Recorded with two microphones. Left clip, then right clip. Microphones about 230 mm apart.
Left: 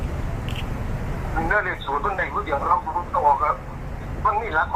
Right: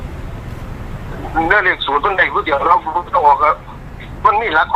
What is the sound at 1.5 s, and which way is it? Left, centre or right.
Speech, right.